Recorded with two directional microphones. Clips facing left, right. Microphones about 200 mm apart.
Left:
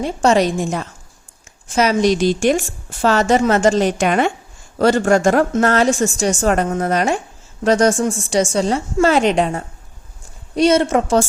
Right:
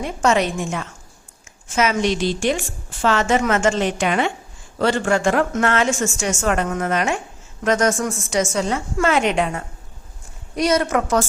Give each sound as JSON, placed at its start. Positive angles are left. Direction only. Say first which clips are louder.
{"t": 0.0, "sound": "a woman's voice", "louder": "left 4 dB", "side_deg": 35}